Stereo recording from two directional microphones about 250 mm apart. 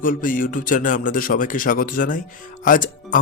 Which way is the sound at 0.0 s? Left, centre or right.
Left.